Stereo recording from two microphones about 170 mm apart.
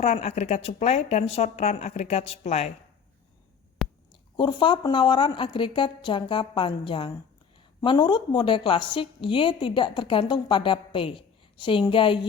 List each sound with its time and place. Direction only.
0.0 s speech: 40° left (ahead or behind)
4.1 s a woman's voice: 25° left (ahead or behind)